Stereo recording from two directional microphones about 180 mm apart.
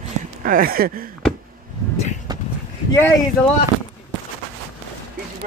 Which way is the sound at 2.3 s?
20° right (ahead or behind).